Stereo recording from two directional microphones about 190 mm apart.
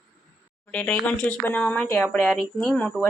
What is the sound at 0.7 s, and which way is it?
A woman's voice, 5° left (ahead or behind).